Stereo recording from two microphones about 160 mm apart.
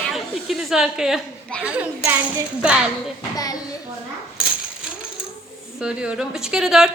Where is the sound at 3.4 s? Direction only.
25° left (ahead or behind).